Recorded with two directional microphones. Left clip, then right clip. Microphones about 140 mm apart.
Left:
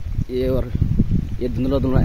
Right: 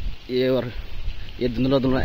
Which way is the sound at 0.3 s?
15° left (ahead or behind).